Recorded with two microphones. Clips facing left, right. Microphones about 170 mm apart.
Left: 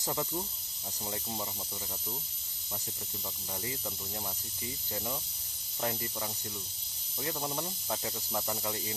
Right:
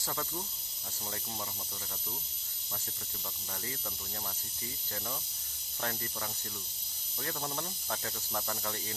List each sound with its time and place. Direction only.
0.0 s speech: 15° left (ahead or behind)
3.5 s speech: 15° left (ahead or behind)
5.8 s speech: 10° left (ahead or behind)